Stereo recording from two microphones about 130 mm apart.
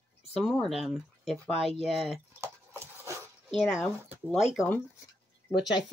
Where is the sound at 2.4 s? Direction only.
20° right (ahead or behind).